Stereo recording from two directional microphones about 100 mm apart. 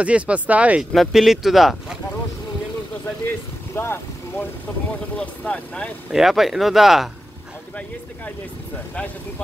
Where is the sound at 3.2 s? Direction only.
25° left (ahead or behind).